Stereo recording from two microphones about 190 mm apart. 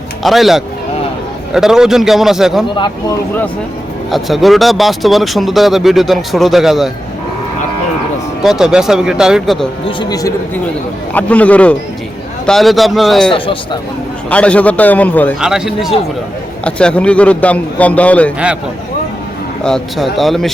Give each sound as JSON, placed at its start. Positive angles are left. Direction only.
{"t": 0.2, "sound": "speech", "side_deg": 0}
{"t": 4.1, "sound": "speech", "side_deg": 0}
{"t": 8.4, "sound": "speech", "side_deg": -5}
{"t": 9.8, "sound": "speech", "side_deg": 20}
{"t": 11.1, "sound": "a man's voice", "side_deg": 10}
{"t": 15.4, "sound": "a man's voice", "side_deg": -5}
{"t": 19.6, "sound": "speech", "side_deg": 0}